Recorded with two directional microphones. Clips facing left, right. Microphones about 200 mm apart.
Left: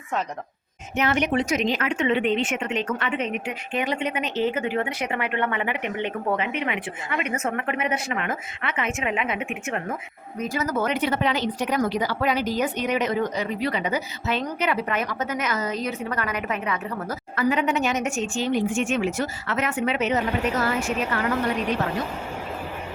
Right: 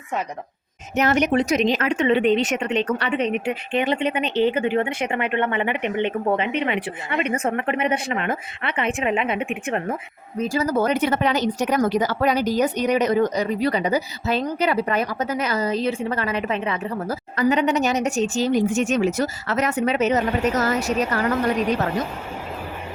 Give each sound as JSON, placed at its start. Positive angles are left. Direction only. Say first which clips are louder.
{"t": 0.9, "sound": "speech", "louder": "right 4 dB", "side_deg": -40}